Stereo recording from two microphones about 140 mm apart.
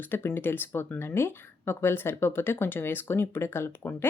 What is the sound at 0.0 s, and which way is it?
A woman's voice, 15° left (ahead or behind).